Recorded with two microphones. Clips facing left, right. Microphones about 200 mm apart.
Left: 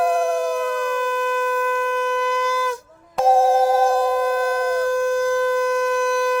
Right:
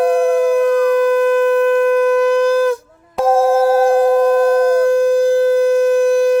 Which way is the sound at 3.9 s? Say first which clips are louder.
Right 8 dB; 55° right (ahead or behind).